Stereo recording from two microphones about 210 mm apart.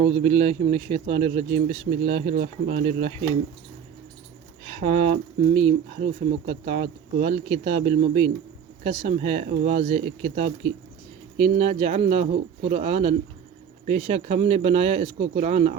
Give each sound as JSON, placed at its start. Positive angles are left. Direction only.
{"t": 0.0, "sound": "speech", "side_deg": -30}
{"t": 4.6, "sound": "speech", "side_deg": -30}